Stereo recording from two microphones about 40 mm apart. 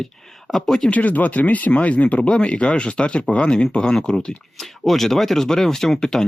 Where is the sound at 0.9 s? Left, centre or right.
Left.